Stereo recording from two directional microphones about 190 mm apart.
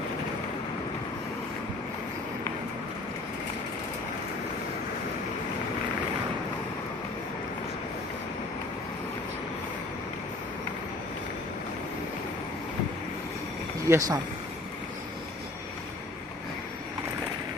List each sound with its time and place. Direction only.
13.8 s speech: 15° right (ahead or behind)